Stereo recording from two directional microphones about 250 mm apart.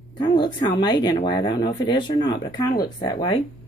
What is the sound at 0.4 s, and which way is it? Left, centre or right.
Speech, centre.